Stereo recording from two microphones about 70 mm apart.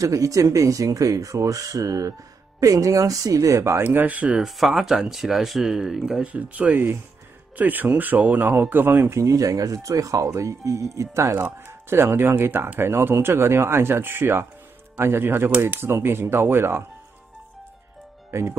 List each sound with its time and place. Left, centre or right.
0.0 s speech: right
4.4 s speech: centre
6.2 s speech: right
9.1 s speech: right
11.6 s speech: right
18.3 s speech: right